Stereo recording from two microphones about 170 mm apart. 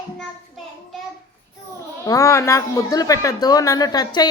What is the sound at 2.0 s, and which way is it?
A woman's voice, 20° left (ahead or behind).